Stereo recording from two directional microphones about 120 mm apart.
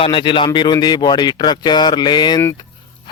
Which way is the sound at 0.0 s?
50° left (ahead or behind).